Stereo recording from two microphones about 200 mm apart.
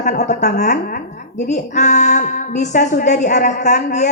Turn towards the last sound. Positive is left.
turn(degrees=35)  # may be behind; listen again after turning